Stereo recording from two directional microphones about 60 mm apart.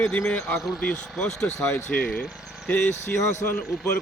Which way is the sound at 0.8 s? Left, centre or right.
Centre.